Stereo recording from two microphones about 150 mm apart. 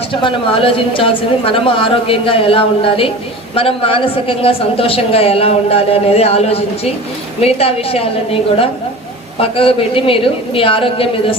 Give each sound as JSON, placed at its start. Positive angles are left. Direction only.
{"t": 0.1, "sound": "a man's voice", "side_deg": 35}